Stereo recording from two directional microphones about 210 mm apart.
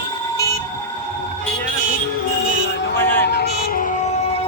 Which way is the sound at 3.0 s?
10° left (ahead or behind).